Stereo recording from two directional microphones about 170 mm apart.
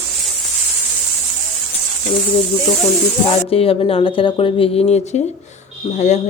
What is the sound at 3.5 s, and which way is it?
Speech, 35° left (ahead or behind).